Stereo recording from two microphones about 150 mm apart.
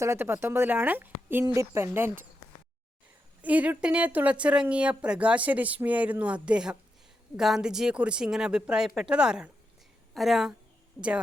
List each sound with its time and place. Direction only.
0.0 s a woman's voice: 20° right (ahead or behind)
3.4 s a woman's voice: 10° right (ahead or behind)